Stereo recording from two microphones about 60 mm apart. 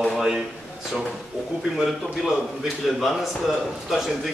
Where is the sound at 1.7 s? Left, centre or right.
Centre.